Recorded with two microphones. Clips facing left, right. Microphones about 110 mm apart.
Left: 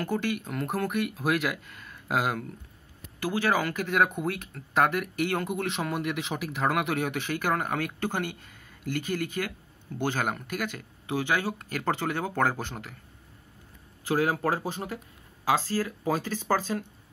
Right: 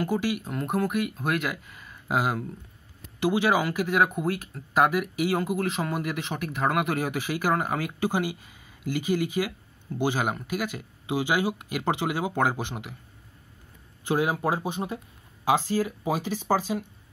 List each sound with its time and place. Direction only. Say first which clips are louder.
0.0 s speech: right 2 dB; 10° right (ahead or behind)
3.2 s speech: right 3 dB; 15° right (ahead or behind)
14.0 s speech: right 1 dB; 15° right (ahead or behind)